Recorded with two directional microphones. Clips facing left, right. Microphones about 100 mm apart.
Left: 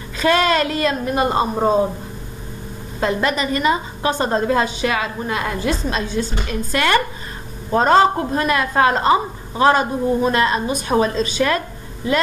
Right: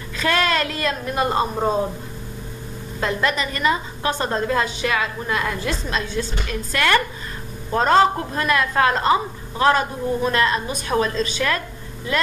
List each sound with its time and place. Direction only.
0.2 s a woman's voice: 15° left (ahead or behind)
3.1 s a woman's voice: 15° left (ahead or behind)
5.6 s a woman's voice: 15° left (ahead or behind)